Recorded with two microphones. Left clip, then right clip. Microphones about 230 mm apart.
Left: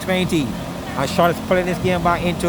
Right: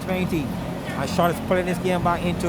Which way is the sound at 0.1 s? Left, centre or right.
Left.